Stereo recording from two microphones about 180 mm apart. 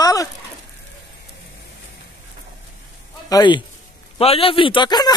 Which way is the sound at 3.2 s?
25° left (ahead or behind).